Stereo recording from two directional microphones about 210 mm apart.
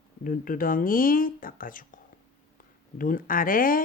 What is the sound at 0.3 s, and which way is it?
Speech, 40° left (ahead or behind).